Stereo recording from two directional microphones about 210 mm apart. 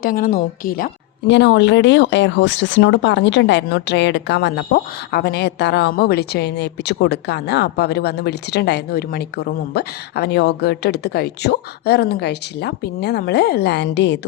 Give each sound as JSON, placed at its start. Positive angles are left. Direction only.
{"t": 0.0, "sound": "speech", "side_deg": 40}
{"t": 1.3, "sound": "speech", "side_deg": 55}